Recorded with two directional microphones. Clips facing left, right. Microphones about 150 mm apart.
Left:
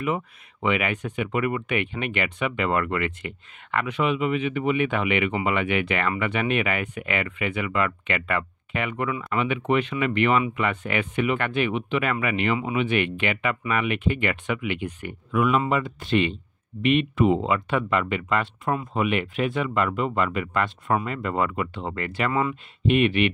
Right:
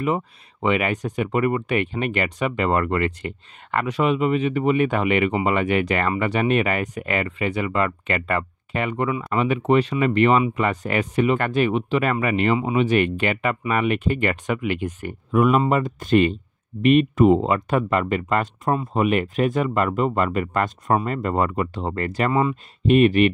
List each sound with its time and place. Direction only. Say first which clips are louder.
0.0 s speech: right 3 dB; 35° right (ahead or behind)
22.3 s speech: right 4 dB; 25° right (ahead or behind)
22.8 s speech: right 5 dB; 40° right (ahead or behind)